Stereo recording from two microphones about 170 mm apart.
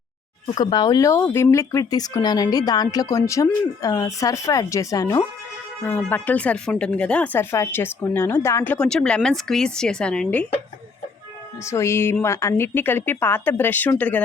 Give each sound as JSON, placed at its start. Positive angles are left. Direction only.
{"t": 0.5, "sound": "speech", "side_deg": 25}
{"t": 11.6, "sound": "speech", "side_deg": 15}